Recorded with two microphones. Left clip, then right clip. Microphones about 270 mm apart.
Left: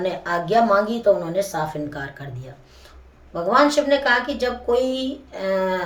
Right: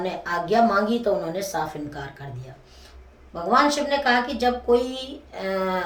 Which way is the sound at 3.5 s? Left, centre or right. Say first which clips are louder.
Left 3 dB; centre.